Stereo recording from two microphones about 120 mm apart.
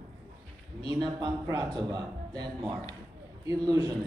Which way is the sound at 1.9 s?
35° right (ahead or behind).